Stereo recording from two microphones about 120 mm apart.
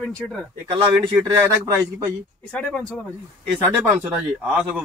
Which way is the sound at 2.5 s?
5° left (ahead or behind).